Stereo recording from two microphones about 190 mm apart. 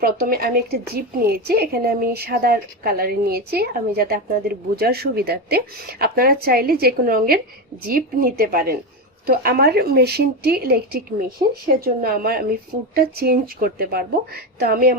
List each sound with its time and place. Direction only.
0.0 s a woman's voice: 50° right (ahead or behind)